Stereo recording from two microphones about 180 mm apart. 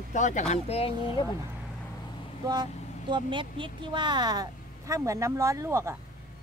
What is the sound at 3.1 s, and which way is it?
A woman's voice, 25° right (ahead or behind).